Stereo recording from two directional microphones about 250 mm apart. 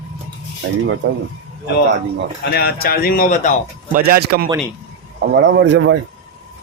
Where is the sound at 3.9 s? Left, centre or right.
Right.